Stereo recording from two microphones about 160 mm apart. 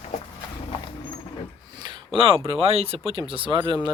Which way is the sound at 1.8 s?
30° right (ahead or behind).